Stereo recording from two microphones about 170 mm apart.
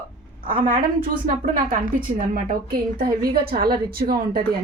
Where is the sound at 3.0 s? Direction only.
60° right (ahead or behind).